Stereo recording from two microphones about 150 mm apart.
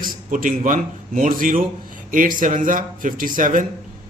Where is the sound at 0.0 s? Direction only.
65° right (ahead or behind).